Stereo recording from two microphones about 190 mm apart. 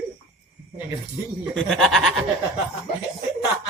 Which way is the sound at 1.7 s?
Centre (ahead or behind).